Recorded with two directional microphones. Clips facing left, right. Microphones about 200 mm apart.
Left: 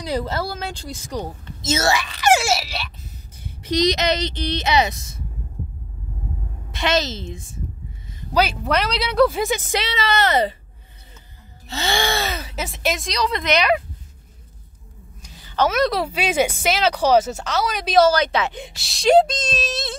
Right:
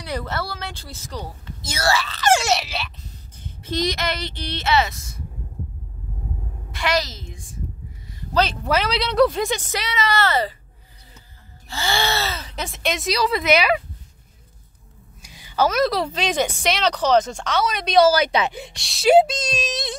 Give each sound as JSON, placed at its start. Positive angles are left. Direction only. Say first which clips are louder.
{"t": 0.7, "sound": "speech", "louder": "left 5 dB", "side_deg": 15}
{"t": 3.4, "sound": "speech", "louder": "left 5 dB", "side_deg": 15}
{"t": 6.7, "sound": "speech", "louder": "left 2 dB", "side_deg": 25}
{"t": 8.2, "sound": "a woman's voice", "louder": "left 1 dB", "side_deg": 10}
{"t": 8.6, "sound": "speech", "louder": "even", "side_deg": 0}
{"t": 9.7, "sound": "speech", "louder": "left 1 dB", "side_deg": 25}
{"t": 11.6, "sound": "speech", "louder": "left 1 dB", "side_deg": 20}
{"t": 15.2, "sound": "a sound", "louder": "even", "side_deg": -10}
{"t": 15.7, "sound": "speech", "louder": "even", "side_deg": 0}
{"t": 18.6, "sound": "speech", "louder": "even", "side_deg": 0}